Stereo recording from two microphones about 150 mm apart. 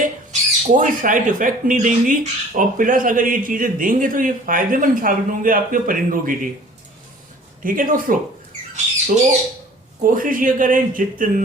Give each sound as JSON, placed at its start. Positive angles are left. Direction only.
{"t": 0.0, "sound": "speech", "side_deg": -60}
{"t": 7.6, "sound": "speech", "side_deg": -65}
{"t": 10.0, "sound": "speech", "side_deg": -65}